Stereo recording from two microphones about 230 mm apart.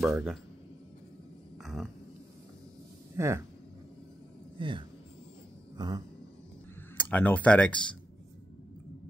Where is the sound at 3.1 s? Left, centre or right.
Centre.